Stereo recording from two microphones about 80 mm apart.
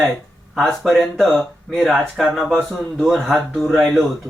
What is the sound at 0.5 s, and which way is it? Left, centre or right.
Speech, centre.